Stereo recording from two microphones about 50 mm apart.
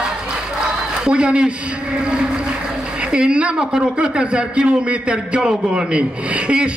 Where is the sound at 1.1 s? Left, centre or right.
Centre.